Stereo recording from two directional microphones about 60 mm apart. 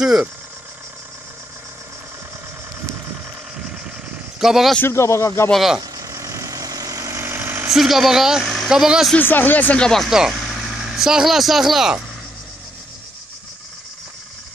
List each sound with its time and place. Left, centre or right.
4.4 s a woman's voice: centre
4.8 s speech: left
5.8 s vehicle: right
7.2 s engine: right
7.7 s a woman's voice: centre
9.2 s speech: left
9.8 s speech: centre
10.0 s speech: centre